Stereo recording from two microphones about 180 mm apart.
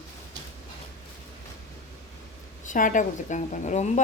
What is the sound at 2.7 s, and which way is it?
A woman's voice, 45° left (ahead or behind).